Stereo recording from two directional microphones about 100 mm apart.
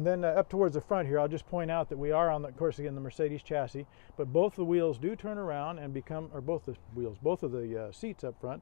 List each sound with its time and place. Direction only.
0.0 s speech: 10° right (ahead or behind)